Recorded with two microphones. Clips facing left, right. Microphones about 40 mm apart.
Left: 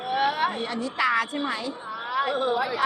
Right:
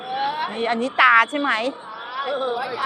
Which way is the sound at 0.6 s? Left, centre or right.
Right.